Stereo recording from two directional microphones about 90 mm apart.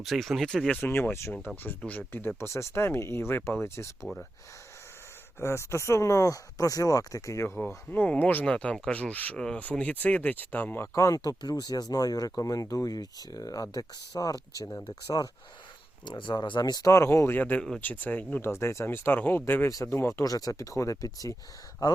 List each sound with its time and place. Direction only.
0.0 s speech: centre (ahead or behind)
0.8 s speech: 20° left (ahead or behind)
5.4 s speech: 30° left (ahead or behind)
7.9 s speech: 15° left (ahead or behind)
10.9 s speech: 40° left (ahead or behind)
16.0 s speech: 60° left (ahead or behind)
16.9 s speech: 30° left (ahead or behind)